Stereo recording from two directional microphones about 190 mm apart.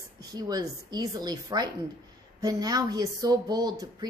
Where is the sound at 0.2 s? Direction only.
20° right (ahead or behind).